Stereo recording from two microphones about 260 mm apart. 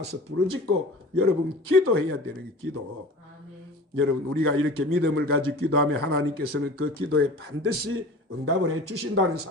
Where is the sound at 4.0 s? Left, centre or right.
Right.